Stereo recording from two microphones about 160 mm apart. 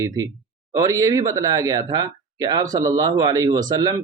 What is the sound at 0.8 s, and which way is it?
Speech, 20° right (ahead or behind).